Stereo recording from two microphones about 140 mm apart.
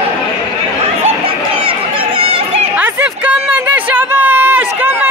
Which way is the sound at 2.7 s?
10° right (ahead or behind).